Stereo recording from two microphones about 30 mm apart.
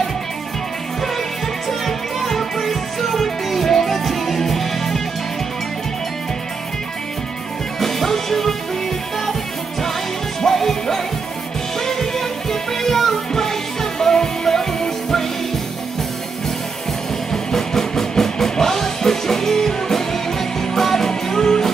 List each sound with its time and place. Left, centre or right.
1.7 s music: centre
7.8 s music: centre
10.4 s music: centre
17.3 s music: centre